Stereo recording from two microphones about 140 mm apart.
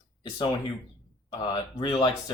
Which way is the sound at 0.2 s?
30° left (ahead or behind).